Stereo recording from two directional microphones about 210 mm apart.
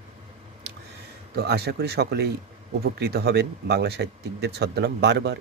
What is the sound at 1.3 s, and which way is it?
A man's voice, 50° right (ahead or behind).